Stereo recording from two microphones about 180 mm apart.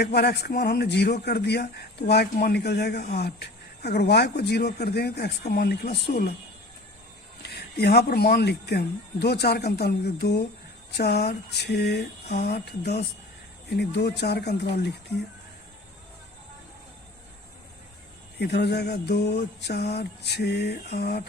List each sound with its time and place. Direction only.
0.0 s speech: 65° left (ahead or behind)
7.4 s speech: 65° left (ahead or behind)
12.3 s speech: 45° left (ahead or behind); by 14.7 s 65° left (ahead or behind)
18.3 s speech: 70° left (ahead or behind)